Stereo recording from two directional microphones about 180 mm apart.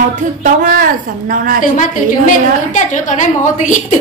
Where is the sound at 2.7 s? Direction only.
45° left (ahead or behind).